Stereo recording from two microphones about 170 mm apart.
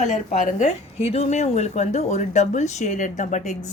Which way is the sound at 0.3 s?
45° left (ahead or behind).